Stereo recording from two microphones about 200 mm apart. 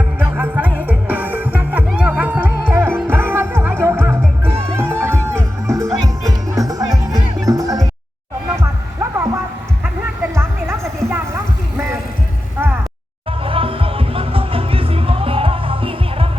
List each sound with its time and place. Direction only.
0.2 s music: 10° right (ahead or behind)
13.4 s music: 25° right (ahead or behind)